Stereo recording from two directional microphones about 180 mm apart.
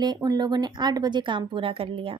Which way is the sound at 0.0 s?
20° right (ahead or behind).